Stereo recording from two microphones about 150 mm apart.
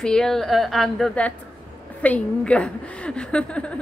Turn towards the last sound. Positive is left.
turn(degrees=5)  # may be behind; listen again after turning